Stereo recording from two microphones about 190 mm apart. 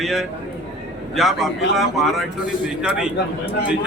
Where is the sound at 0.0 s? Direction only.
Centre (ahead or behind).